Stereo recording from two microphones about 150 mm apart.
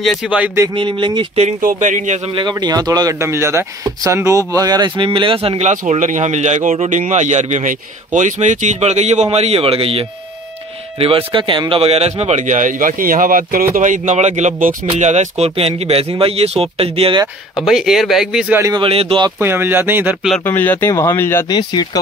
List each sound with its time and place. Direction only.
0.3 s speech: 10° right (ahead or behind)
0.7 s speech: 30° right (ahead or behind)
1.6 s speech: 60° right (ahead or behind)
2.3 s speech: 30° right (ahead or behind); by 13.7 s 70° right (ahead or behind)
13.7 s speech: 55° right (ahead or behind); by 17.2 s 40° right (ahead or behind)
17.6 s speech: centre (ahead or behind)
18.8 s speech: 40° right (ahead or behind)
19.4 s speech: 15° right (ahead or behind)
20.4 s speech: 10° left (ahead or behind)
21.5 s speech: 25° left (ahead or behind)